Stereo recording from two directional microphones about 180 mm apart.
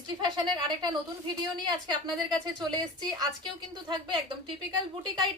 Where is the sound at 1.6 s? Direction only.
25° right (ahead or behind).